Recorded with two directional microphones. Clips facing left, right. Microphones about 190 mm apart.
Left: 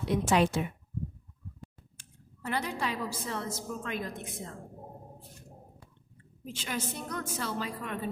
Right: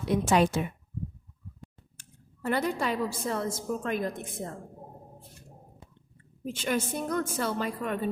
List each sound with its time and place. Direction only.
0.3 s a woman's voice: 45° right (ahead or behind)
2.0 s a woman's voice: 50° right (ahead or behind)
6.4 s a woman's voice: 55° right (ahead or behind)